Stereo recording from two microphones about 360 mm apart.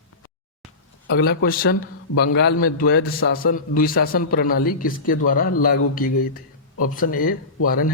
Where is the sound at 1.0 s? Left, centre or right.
Left.